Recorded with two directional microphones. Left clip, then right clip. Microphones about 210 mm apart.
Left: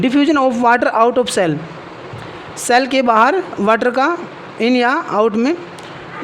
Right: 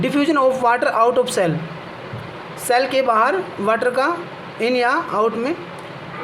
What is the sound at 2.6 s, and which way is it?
A woman's voice, 45° left (ahead or behind).